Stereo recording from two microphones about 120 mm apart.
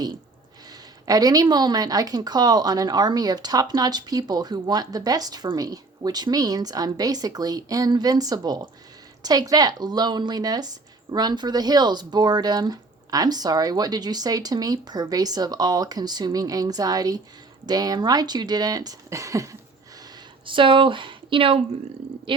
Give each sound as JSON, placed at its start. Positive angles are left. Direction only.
{"t": 1.0, "sound": "speech", "side_deg": -30}
{"t": 20.4, "sound": "speech", "side_deg": -45}